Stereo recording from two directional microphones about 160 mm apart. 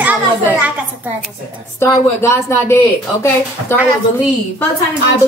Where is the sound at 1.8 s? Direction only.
15° left (ahead or behind).